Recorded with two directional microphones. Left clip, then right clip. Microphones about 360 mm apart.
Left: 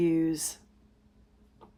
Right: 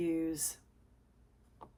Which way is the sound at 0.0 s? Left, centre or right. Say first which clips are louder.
Left 8 dB; left.